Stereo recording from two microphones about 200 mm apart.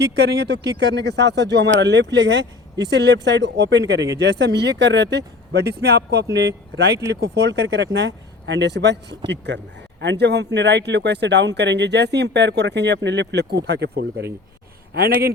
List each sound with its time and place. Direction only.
0.0 s speech: 55° right (ahead or behind)